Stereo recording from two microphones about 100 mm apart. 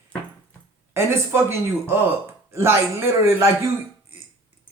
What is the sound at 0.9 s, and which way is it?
A man's voice, 25° right (ahead or behind).